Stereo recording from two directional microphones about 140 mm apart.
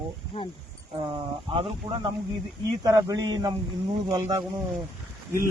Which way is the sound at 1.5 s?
35° right (ahead or behind).